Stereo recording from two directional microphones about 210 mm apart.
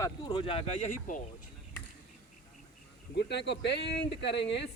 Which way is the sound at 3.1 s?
55° left (ahead or behind).